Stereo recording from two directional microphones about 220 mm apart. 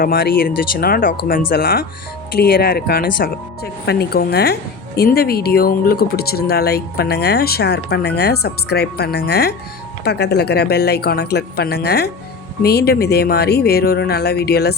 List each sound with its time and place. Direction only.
0.0 s speech: 40° left (ahead or behind)